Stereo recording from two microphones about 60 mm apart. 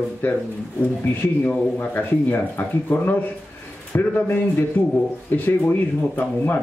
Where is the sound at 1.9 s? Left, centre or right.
Left.